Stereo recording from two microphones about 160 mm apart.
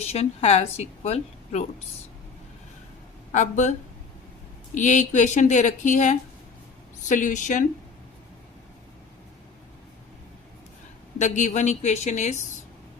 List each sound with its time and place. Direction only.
0.0 s a woman's voice: 40° left (ahead or behind)
3.3 s a woman's voice: 50° left (ahead or behind)
11.2 s a woman's voice: 50° left (ahead or behind)